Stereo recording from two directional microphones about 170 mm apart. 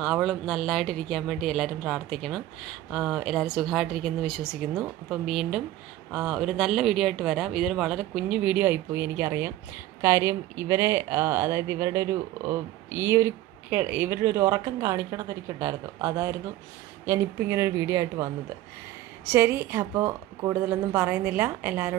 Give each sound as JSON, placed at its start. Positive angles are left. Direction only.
{"t": 0.0, "sound": "speech", "side_deg": 0}
{"t": 19.3, "sound": "speech", "side_deg": -15}